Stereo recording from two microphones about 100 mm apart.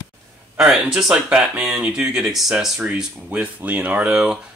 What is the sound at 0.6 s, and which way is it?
Speech, 5° right (ahead or behind).